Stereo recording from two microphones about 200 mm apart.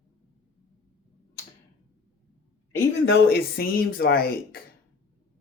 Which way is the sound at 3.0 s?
50° left (ahead or behind).